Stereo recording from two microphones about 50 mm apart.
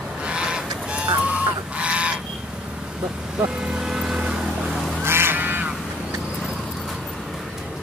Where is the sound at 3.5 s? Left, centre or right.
Centre.